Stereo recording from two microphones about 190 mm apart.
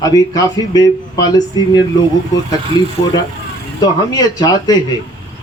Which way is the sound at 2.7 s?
20° left (ahead or behind).